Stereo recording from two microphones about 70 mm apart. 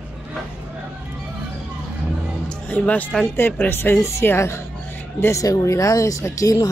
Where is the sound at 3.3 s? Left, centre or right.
Left.